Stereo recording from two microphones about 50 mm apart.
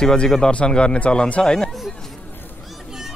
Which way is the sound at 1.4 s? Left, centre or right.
Centre.